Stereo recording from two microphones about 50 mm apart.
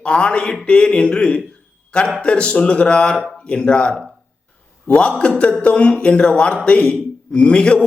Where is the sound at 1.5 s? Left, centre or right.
Centre.